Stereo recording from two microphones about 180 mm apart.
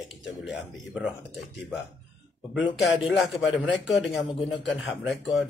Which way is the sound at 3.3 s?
75° left (ahead or behind).